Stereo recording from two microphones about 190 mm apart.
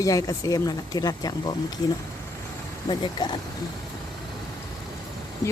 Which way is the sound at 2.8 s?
20° left (ahead or behind).